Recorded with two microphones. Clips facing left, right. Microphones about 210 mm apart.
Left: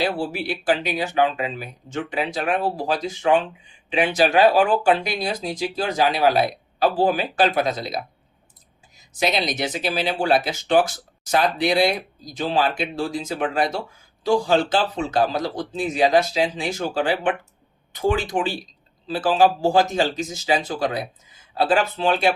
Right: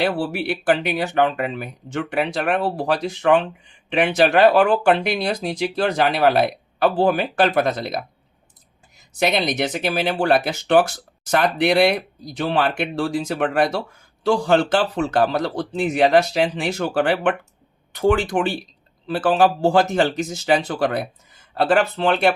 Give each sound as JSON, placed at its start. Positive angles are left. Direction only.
{"t": 0.0, "sound": "speech", "side_deg": -60}
{"t": 9.1, "sound": "speech", "side_deg": -55}